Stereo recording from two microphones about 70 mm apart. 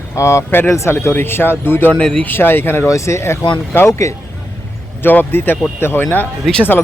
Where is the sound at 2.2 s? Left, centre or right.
Left.